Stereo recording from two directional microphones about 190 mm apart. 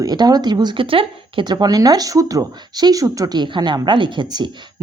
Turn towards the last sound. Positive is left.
turn(degrees=-25)  # may be behind; listen again after turning